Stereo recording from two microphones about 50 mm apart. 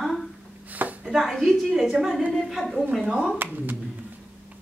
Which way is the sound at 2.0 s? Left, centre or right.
Centre.